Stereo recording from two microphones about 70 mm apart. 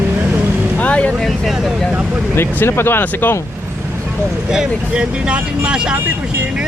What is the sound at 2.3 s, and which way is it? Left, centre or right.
Speech, left.